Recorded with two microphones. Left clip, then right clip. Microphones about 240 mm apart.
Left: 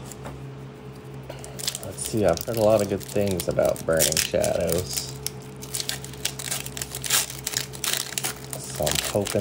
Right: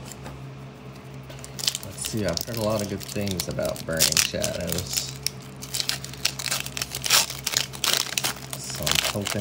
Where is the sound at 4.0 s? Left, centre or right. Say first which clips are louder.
Even; centre.